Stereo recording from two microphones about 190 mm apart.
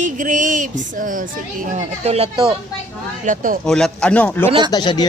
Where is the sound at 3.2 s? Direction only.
45° right (ahead or behind).